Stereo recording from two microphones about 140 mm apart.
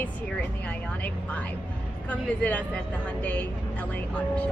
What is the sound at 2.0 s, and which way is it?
Speech, 10° left (ahead or behind).